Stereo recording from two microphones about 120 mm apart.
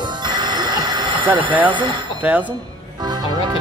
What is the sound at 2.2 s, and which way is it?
Speech, 15° right (ahead or behind).